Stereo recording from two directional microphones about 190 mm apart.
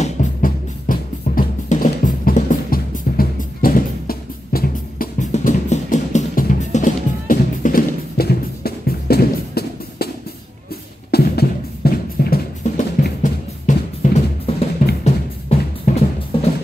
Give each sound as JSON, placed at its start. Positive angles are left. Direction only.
{"t": 0.0, "sound": "music", "side_deg": 45}
{"t": 14.8, "sound": "drum", "side_deg": 45}
{"t": 15.9, "sound": "music", "side_deg": 45}
{"t": 16.3, "sound": "music", "side_deg": 30}